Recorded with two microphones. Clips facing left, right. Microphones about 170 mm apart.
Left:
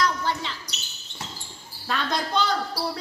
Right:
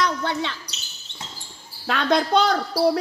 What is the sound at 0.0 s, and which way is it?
Basketball bounce, 65° right (ahead or behind).